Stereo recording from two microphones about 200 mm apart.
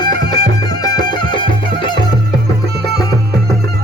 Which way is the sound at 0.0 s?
20° left (ahead or behind).